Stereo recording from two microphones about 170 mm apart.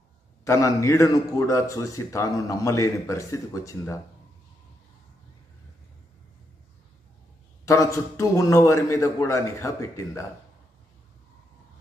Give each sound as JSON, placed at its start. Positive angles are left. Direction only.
{"t": 0.5, "sound": "a man's voice", "side_deg": 20}
{"t": 7.6, "sound": "a man's voice", "side_deg": 20}